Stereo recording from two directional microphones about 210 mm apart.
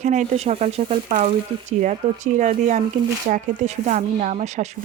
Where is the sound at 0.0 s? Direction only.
35° right (ahead or behind).